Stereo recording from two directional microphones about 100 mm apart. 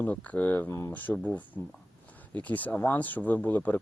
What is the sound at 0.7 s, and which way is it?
Speech, 30° left (ahead or behind).